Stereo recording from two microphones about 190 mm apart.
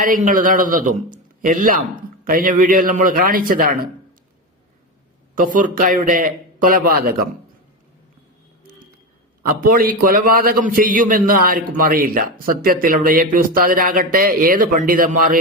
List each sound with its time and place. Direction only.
0.0 s a man's voice: 45° right (ahead or behind)
5.3 s a man's voice: 45° right (ahead or behind)
9.6 s a man's voice: 50° right (ahead or behind)